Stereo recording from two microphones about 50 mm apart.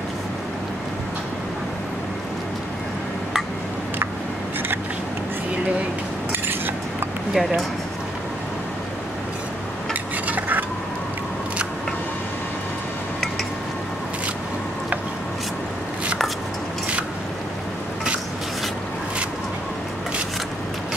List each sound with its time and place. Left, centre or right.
6.4 s a sound: right
7.3 s speech: centre
10.2 s cutlery: right